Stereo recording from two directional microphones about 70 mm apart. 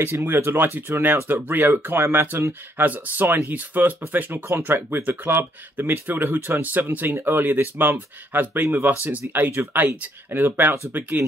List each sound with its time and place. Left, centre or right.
0.0 s speech: right
2.8 s speech: right